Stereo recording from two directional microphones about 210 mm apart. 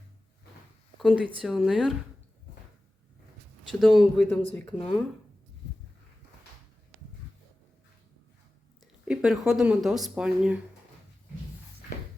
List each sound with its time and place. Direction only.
0.9 s speech: centre (ahead or behind)
3.6 s speech: centre (ahead or behind)
9.0 s speech: centre (ahead or behind)